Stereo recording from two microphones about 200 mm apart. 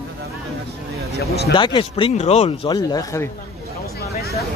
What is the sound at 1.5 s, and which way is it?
Speech, 25° left (ahead or behind).